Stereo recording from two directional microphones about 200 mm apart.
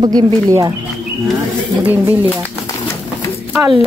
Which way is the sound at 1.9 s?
10° right (ahead or behind).